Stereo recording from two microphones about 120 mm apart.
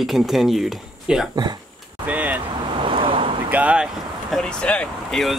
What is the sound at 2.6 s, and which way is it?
Vehicle, 45° right (ahead or behind).